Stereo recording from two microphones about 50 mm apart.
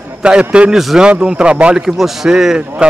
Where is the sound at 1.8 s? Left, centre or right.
Centre.